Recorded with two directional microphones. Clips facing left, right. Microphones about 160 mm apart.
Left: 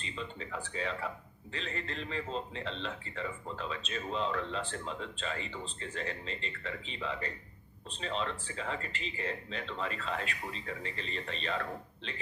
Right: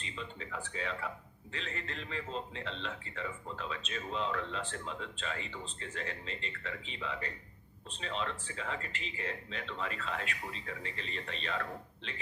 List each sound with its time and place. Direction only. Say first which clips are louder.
0.0 s a man's voice: left 2 dB; 35° left (ahead or behind)